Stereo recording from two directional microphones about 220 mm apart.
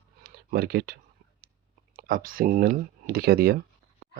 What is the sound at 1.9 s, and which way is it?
Speech, 40° right (ahead or behind).